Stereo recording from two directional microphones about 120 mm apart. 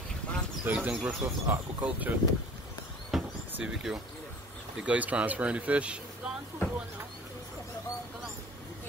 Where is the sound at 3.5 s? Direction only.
5° right (ahead or behind).